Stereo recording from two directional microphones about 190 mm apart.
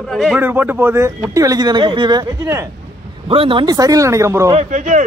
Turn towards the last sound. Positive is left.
turn(degrees=-40)  # may be behind; listen again after turning